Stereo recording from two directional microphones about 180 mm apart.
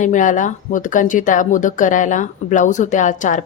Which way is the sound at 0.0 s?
45° left (ahead or behind).